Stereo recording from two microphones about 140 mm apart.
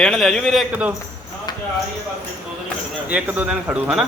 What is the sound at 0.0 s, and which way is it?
Speech, 5° left (ahead or behind).